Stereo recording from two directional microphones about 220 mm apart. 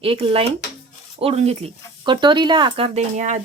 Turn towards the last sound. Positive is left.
turn(degrees=-35)  # may be behind; listen again after turning